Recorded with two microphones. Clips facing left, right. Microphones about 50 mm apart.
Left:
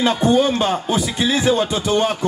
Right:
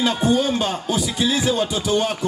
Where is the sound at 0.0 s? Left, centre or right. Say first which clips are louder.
Left 3 dB; left.